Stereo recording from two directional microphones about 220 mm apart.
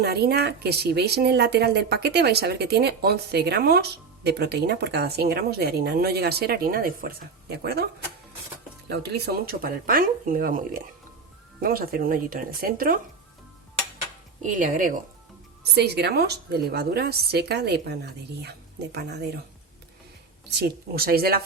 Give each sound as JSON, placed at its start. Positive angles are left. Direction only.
{"t": 0.0, "sound": "speech", "side_deg": -45}
{"t": 8.9, "sound": "speech", "side_deg": -50}
{"t": 14.4, "sound": "speech", "side_deg": -35}
{"t": 15.7, "sound": "speech", "side_deg": -50}
{"t": 20.5, "sound": "speech", "side_deg": -45}